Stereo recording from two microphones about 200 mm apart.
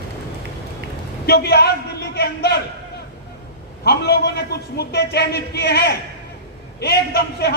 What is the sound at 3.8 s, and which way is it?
A man's voice, 55° left (ahead or behind).